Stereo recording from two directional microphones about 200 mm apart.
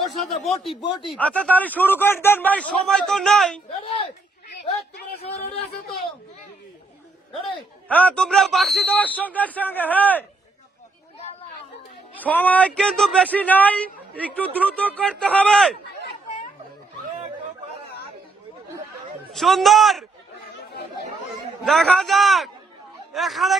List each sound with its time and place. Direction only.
0.0 s a man's voice: centre (ahead or behind)
0.8 s speech: 25° left (ahead or behind)
1.2 s speech: 5° left (ahead or behind)
3.8 s speech: 25° left (ahead or behind)
7.9 s speech: 5° left (ahead or behind)
12.1 s speech: 10° left (ahead or behind)
19.3 s a man's voice: centre (ahead or behind)
21.7 s a man's voice: 5° left (ahead or behind)